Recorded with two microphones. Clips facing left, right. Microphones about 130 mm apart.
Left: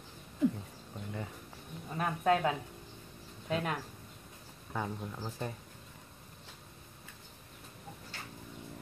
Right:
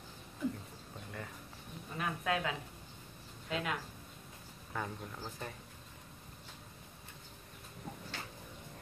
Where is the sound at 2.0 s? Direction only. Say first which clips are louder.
Left 6 dB; 35° left (ahead or behind).